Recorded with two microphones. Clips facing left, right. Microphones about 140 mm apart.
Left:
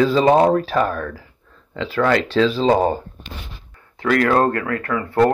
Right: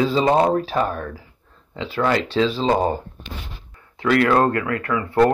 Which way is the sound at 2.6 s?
80° left.